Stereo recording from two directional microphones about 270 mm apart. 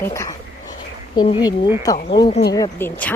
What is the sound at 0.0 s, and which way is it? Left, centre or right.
Speech, centre.